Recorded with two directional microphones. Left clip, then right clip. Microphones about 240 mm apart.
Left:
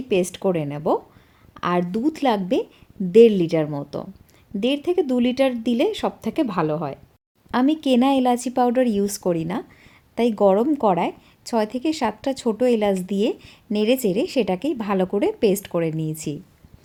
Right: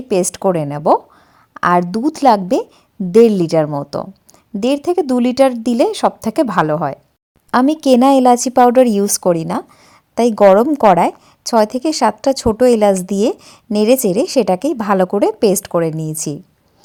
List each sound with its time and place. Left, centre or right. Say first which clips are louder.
0.1 s a woman's voice: right 6 dB; right